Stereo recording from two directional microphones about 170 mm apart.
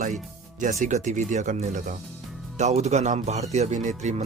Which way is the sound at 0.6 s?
45° right (ahead or behind).